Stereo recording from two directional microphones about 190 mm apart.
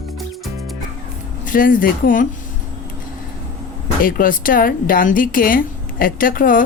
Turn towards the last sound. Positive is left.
turn(degrees=45)  # may be behind; listen again after turning